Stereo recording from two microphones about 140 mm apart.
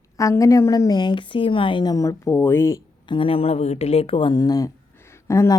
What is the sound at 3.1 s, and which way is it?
A woman's voice, 40° left (ahead or behind).